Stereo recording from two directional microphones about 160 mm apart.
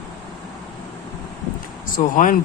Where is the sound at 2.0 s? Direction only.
50° left (ahead or behind).